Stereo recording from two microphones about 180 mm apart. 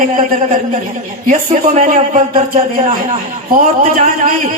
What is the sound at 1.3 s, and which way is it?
A man's voice, 50° right (ahead or behind).